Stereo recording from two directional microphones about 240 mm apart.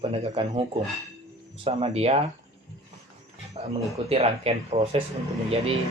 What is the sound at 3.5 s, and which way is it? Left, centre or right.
Speech, right.